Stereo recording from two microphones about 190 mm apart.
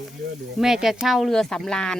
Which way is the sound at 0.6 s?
5° right (ahead or behind).